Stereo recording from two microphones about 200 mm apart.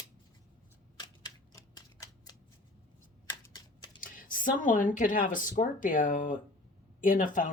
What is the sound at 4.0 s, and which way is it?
Speech, 40° left (ahead or behind).